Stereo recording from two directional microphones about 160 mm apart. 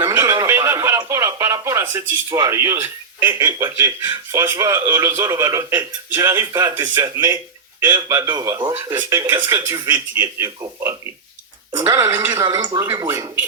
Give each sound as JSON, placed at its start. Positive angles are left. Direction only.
{"t": 0.0, "sound": "a man's voice", "side_deg": -15}